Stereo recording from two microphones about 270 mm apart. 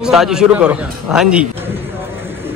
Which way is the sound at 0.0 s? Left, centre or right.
Centre.